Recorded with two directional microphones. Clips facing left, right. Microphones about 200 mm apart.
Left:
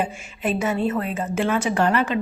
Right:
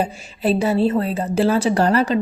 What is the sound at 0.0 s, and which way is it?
A woman's voice, 35° right (ahead or behind).